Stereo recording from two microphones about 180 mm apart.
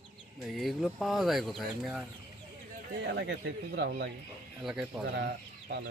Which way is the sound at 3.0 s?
75° right (ahead or behind).